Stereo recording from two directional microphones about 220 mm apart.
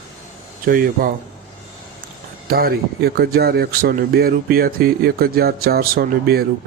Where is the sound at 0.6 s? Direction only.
40° right (ahead or behind).